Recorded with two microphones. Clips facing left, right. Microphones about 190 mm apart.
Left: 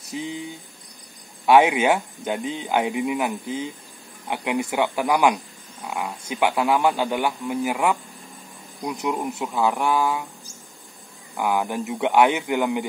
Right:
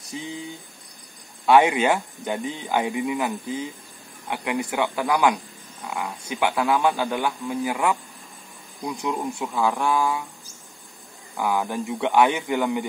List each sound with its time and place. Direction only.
1.4 s speech: 15° left (ahead or behind)
8.8 s speech: 15° left (ahead or behind)
11.3 s speech: 15° left (ahead or behind)